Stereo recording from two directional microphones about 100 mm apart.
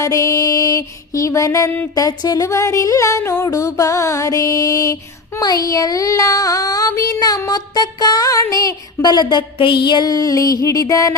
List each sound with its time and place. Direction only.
0.0 s music: 35° left (ahead or behind)